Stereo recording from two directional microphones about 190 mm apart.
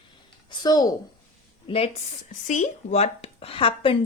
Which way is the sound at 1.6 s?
30° left (ahead or behind).